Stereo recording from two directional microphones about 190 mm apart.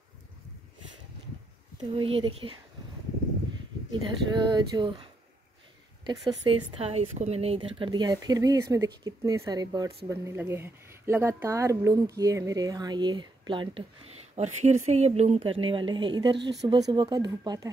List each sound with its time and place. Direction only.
2.0 s a woman's voice: 30° right (ahead or behind)
3.9 s a woman's voice: 25° right (ahead or behind)
6.3 s a woman's voice: 25° right (ahead or behind)
14.3 s a woman's voice: 35° right (ahead or behind); by 17.6 s 20° right (ahead or behind)